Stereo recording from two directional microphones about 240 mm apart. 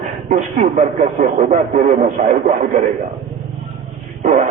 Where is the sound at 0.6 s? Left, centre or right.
Right.